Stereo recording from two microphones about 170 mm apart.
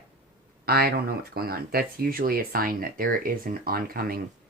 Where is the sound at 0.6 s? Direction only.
60° right (ahead or behind).